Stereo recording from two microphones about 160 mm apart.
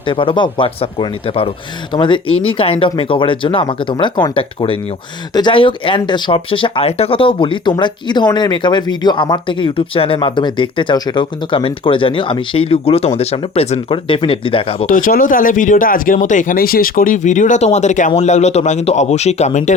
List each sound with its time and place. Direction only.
0.1 s speech: 30° left (ahead or behind)
14.8 s a man's voice: 60° left (ahead or behind)